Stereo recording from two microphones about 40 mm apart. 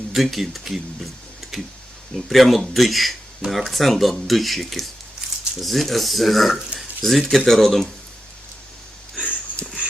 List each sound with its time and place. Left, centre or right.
0.1 s speech: centre
1.4 s tick-tock: centre
2.1 s speech: centre
9.2 s a sound: left